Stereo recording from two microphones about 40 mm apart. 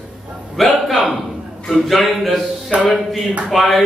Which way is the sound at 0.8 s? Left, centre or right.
Centre.